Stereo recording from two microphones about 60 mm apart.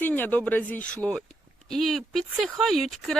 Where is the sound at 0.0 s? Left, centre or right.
Left.